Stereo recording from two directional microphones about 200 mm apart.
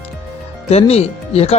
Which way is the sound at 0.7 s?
30° left (ahead or behind).